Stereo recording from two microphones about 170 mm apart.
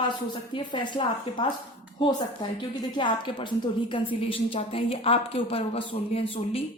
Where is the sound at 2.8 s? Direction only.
30° left (ahead or behind).